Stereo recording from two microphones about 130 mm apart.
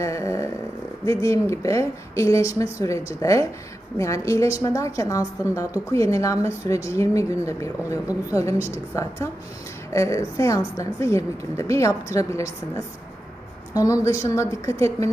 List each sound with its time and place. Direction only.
0.0 s a sound: 25° left (ahead or behind)
1.0 s a woman's voice: 25° left (ahead or behind)
8.5 s a woman's voice: 15° right (ahead or behind)
9.0 s a woman's voice: 25° left (ahead or behind)